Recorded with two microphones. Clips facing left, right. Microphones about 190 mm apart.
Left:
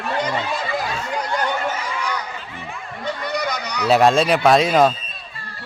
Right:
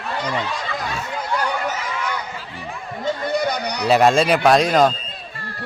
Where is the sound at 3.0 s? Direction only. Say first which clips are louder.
Right 3 dB; 30° right (ahead or behind).